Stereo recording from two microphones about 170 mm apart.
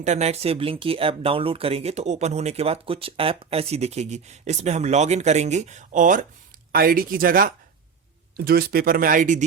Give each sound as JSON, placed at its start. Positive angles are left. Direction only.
{"t": 0.0, "sound": "speech", "side_deg": -40}
{"t": 6.7, "sound": "speech", "side_deg": -60}